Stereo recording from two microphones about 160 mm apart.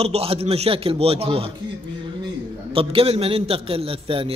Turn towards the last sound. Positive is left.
turn(degrees=-35)  # may be behind; listen again after turning